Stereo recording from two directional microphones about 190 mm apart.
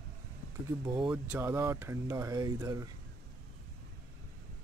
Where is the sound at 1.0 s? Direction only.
10° right (ahead or behind).